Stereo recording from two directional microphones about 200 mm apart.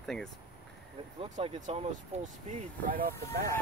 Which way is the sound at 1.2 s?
30° right (ahead or behind).